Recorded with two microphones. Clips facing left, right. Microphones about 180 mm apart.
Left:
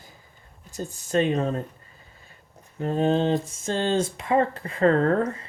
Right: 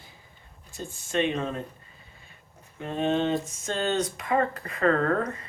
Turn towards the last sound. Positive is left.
turn(degrees=30)  # may be behind; listen again after turning